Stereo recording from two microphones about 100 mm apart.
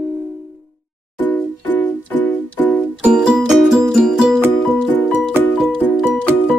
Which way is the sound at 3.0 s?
10° right (ahead or behind).